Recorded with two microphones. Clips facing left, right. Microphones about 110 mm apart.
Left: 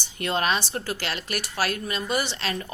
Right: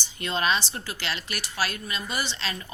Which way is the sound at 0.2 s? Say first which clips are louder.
Left 1 dB; 55° left (ahead or behind).